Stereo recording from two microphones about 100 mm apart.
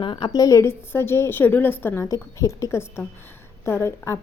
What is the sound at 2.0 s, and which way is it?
A woman's voice, 35° left (ahead or behind).